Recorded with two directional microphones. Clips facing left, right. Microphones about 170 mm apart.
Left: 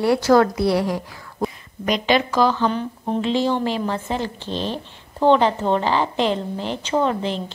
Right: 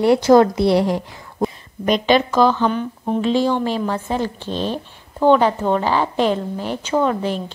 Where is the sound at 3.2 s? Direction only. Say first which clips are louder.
Right 2 dB; 20° left (ahead or behind).